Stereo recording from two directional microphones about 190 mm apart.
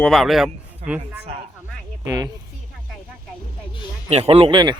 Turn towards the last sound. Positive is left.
turn(degrees=-25)  # may be behind; listen again after turning